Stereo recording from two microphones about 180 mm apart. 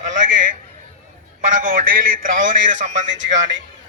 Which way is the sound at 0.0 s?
45° right (ahead or behind).